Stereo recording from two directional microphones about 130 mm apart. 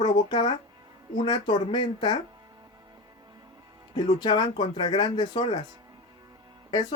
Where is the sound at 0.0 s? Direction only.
35° left (ahead or behind).